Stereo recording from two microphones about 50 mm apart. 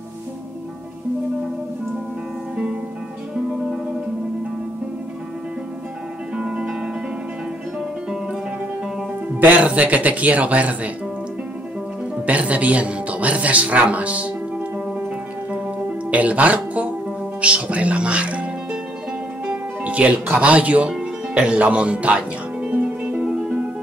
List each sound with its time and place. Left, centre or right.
2.5 s music: right
3.5 s music: centre
6.3 s music: right
9.4 s speech: right
12.3 s speech: right
15.5 s music: right
20.3 s speech: right
20.9 s music: right
23.2 s music: centre